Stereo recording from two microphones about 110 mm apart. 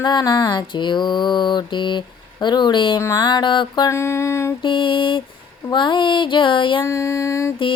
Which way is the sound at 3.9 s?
25° left (ahead or behind).